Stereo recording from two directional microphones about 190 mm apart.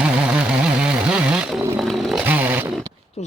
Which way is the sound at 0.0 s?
5° right (ahead or behind).